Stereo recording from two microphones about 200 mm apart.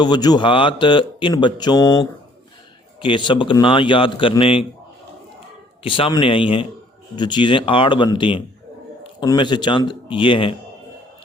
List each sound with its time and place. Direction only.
0.0 s speech: 20° left (ahead or behind)
5.8 s speech: 25° left (ahead or behind)